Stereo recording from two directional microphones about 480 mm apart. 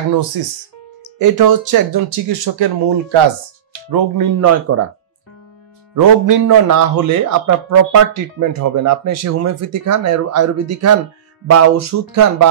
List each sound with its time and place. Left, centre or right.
0.1 s a man's voice: right
2.2 s speech: right
3.9 s a man's voice: right
5.9 s a man's voice: right